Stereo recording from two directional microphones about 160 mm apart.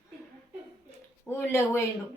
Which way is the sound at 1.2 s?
15° left (ahead or behind).